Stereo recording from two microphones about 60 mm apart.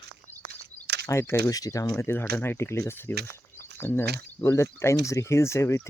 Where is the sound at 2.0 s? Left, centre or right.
Left.